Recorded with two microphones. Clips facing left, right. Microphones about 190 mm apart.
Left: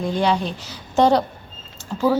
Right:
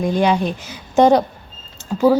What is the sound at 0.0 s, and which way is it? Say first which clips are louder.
A woman's voice: right 4 dB; 15° right (ahead or behind).